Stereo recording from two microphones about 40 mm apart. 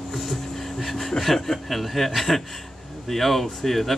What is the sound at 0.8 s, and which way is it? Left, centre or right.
Speech, centre.